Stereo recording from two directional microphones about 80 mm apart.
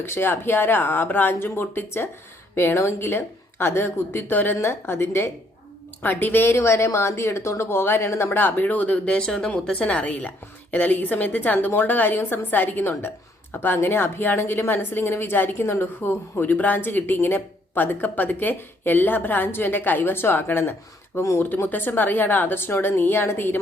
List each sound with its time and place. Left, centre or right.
0.0 s a woman's voice: left